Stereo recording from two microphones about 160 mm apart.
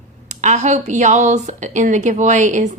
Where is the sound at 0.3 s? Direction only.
45° right (ahead or behind).